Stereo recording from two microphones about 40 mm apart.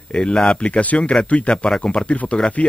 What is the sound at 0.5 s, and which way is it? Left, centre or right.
Speech, left.